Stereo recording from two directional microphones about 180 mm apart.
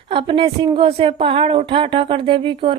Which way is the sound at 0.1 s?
30° right (ahead or behind).